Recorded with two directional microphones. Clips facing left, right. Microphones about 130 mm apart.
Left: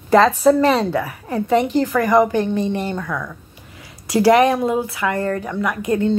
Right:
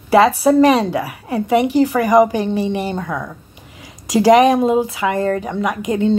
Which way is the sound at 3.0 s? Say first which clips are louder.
Right 2 dB; 25° right (ahead or behind).